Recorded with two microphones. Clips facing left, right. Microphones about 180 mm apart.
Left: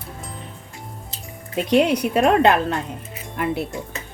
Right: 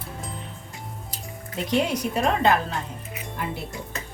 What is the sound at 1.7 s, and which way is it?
Speech, 65° left (ahead or behind).